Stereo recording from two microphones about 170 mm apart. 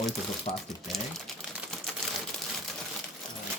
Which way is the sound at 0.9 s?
Centre (ahead or behind).